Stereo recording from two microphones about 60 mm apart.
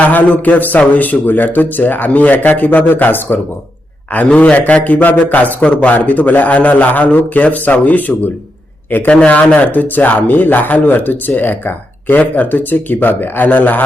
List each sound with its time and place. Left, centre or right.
0.0 s a man's voice: left
4.3 s a man's voice: centre